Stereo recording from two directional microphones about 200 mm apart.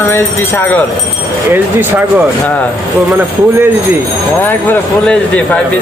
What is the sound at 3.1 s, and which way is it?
Speech, 10° right (ahead or behind).